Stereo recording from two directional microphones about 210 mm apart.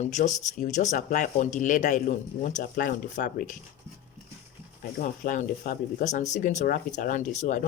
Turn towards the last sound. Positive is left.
turn(degrees=35)  # may be behind; listen again after turning